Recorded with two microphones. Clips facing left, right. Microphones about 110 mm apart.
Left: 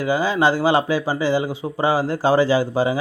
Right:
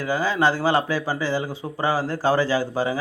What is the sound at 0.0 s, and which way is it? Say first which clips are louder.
Speech: left 3 dB; 15° left (ahead or behind).